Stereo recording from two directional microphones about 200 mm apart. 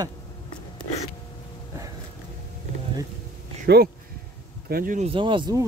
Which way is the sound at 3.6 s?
55° right (ahead or behind).